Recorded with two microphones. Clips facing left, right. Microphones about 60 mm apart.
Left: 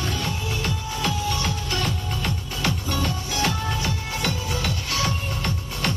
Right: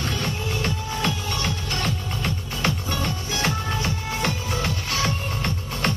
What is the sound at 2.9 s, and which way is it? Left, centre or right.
Music, right.